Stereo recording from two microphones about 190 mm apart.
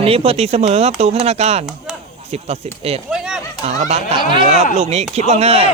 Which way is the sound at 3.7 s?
35° right (ahead or behind).